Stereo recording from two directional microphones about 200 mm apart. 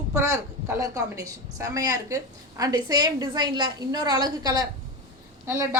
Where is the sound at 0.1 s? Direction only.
15° right (ahead or behind).